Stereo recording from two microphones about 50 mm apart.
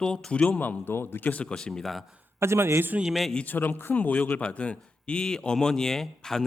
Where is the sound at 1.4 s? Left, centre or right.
Centre.